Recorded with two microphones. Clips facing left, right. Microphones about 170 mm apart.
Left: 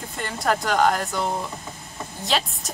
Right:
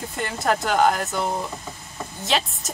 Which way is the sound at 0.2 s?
Centre (ahead or behind).